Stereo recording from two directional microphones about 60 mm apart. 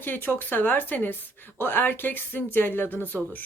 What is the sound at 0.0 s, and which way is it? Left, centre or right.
Speech, left.